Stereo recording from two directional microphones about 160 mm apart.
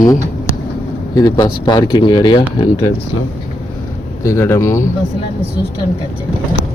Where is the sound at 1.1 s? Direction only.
25° left (ahead or behind).